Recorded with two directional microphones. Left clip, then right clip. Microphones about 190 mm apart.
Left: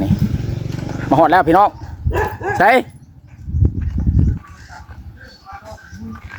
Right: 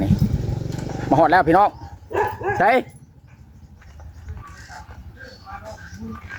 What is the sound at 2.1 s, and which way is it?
Dog, 65° left (ahead or behind).